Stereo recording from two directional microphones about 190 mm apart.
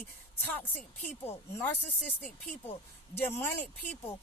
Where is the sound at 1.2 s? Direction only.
10° left (ahead or behind).